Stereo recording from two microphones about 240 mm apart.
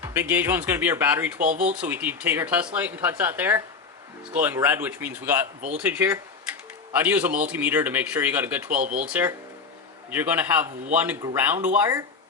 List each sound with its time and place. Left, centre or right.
0.0 s speech: centre
1.4 s speech: right
1.6 s speech: centre
8.7 s speech: right
9.0 s speech: centre